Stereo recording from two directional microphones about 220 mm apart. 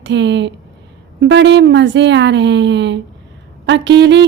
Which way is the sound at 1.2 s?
55° right (ahead or behind).